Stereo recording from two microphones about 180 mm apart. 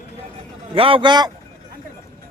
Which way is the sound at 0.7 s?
30° right (ahead or behind).